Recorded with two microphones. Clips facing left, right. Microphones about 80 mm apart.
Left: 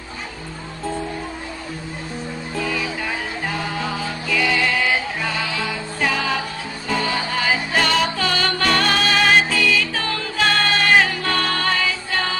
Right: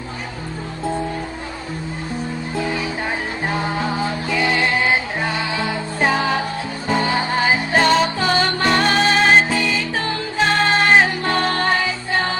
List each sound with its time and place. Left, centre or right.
2.6 s music: right